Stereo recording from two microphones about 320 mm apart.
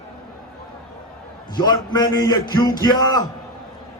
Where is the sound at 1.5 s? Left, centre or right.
Centre.